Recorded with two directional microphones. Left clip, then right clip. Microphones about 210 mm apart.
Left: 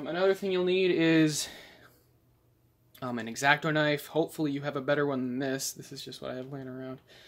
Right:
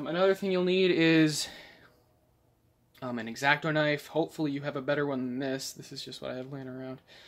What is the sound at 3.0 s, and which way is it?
Speech, 10° left (ahead or behind).